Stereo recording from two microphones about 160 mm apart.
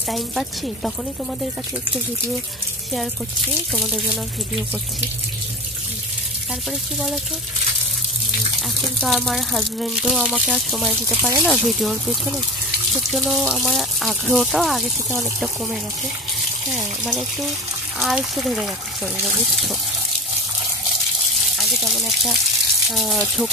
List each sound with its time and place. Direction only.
0.1 s speech: centre (ahead or behind)
3.7 s speech: 5° left (ahead or behind)
8.5 s speech: centre (ahead or behind)
11.1 s speech: 15° right (ahead or behind)
11.4 s speech: centre (ahead or behind)
13.1 s speech: centre (ahead or behind)
16.7 s speech: centre (ahead or behind)
21.5 s water: centre (ahead or behind)
22.8 s speech: centre (ahead or behind)